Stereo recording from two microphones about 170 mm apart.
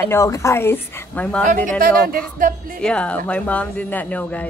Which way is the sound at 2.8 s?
5° left (ahead or behind).